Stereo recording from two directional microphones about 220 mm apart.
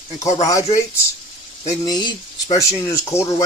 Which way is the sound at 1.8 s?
20° left (ahead or behind).